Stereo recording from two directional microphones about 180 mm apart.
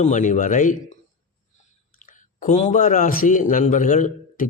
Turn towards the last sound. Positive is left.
turn(degrees=50)  # may be behind; listen again after turning